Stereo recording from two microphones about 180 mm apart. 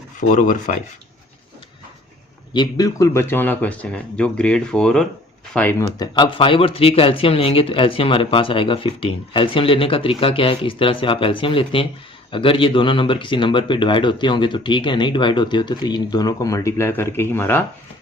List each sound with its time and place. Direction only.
0.2 s rub: 45° left (ahead or behind)
2.5 s speech: 25° left (ahead or behind); by 5.7 s 5° left (ahead or behind)
6.0 s speech: 25° left (ahead or behind)